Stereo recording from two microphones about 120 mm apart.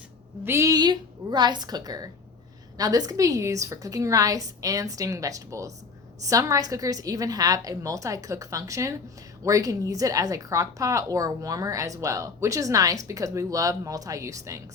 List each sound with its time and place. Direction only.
0.4 s a woman's voice: 25° right (ahead or behind)